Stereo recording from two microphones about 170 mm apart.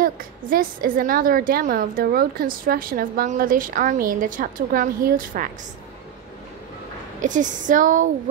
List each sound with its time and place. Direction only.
0.0 s a woman's voice: 55° right (ahead or behind)
7.2 s a woman's voice: 50° right (ahead or behind)